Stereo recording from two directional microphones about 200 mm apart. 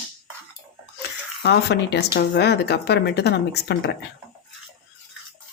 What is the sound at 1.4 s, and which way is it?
Speech, 55° left (ahead or behind).